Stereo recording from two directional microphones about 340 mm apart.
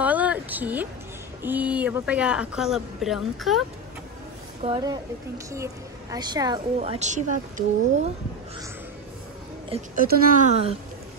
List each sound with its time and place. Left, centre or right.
0.0 s a sound: centre
1.4 s speech: centre
4.6 s a woman's voice: centre
9.7 s speech: right